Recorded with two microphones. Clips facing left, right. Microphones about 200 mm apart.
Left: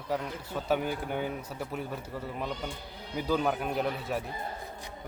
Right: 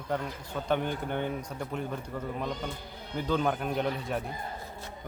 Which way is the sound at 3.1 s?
5° left (ahead or behind).